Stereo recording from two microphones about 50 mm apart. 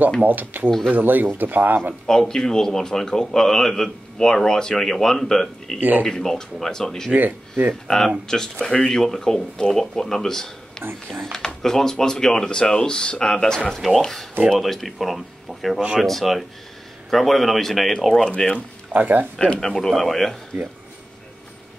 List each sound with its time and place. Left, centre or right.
0.2 s speech: right
0.7 s a man's voice: centre
0.9 s speech: right
2.0 s a man's voice: centre
5.8 s speech: right
6.0 s a man's voice: centre
7.1 s speech: right
8.3 s a man's voice: centre
10.8 s speech: right
11.3 s a man's voice: centre
13.7 s a man's voice: centre
18.9 s speech: right
19.3 s a man's voice: centre